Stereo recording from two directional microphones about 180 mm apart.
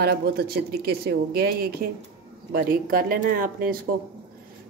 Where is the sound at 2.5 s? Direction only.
55° right (ahead or behind).